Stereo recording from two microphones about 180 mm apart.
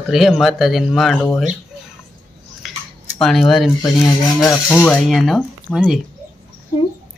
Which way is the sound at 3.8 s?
20° left (ahead or behind).